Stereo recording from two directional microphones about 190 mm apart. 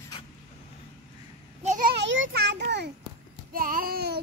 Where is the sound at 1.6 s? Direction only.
45° right (ahead or behind).